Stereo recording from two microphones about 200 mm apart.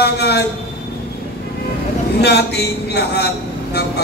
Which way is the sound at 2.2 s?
55° left (ahead or behind).